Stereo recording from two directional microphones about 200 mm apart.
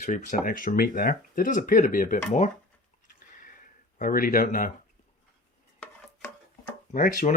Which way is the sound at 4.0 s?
45° left (ahead or behind).